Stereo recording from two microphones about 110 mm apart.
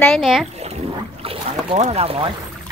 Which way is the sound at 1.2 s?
60° right (ahead or behind).